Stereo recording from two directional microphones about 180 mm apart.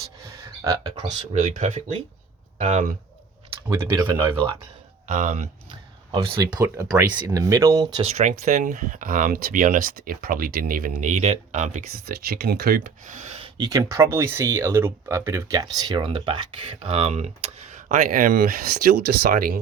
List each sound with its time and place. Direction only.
0.7 s speech: 35° right (ahead or behind)
3.7 s speech: 15° right (ahead or behind)
5.0 s speech: 45° right (ahead or behind)
5.6 s a sound: 30° right (ahead or behind)
7.3 s speech: 15° right (ahead or behind)
8.0 s speech: 40° right (ahead or behind)
12.0 s speech: 60° right (ahead or behind); by 13.5 s 35° right (ahead or behind)
13.6 s speech: 20° right (ahead or behind); by 19.5 s 50° right (ahead or behind)